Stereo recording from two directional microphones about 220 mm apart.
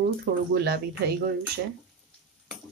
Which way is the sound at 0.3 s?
35° right (ahead or behind).